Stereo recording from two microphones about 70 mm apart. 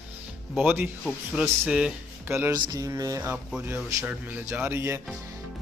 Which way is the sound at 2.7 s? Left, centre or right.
Right.